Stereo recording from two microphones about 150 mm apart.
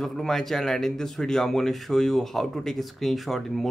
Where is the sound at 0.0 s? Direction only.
Centre (ahead or behind).